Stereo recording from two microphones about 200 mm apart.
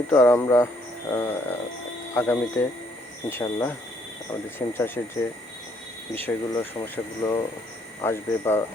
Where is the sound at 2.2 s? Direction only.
10° left (ahead or behind).